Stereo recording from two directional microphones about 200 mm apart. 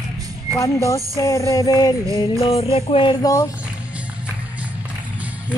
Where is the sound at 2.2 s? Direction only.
30° left (ahead or behind).